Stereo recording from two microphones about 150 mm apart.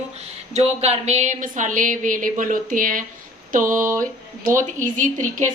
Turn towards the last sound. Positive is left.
turn(degrees=-55)  # may be behind; listen again after turning